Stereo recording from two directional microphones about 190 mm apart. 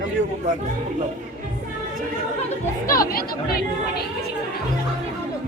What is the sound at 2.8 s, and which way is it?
Speech, 50° left (ahead or behind).